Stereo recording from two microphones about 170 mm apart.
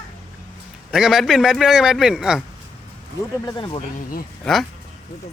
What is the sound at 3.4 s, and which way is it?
Speech, 25° left (ahead or behind).